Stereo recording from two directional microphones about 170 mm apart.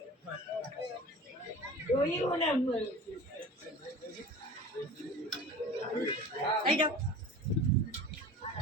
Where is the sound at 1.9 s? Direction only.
20° left (ahead or behind).